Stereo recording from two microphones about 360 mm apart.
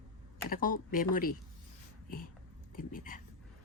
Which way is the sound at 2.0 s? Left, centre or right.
Left.